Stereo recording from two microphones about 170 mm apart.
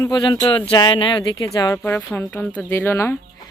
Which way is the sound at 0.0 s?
25° left (ahead or behind).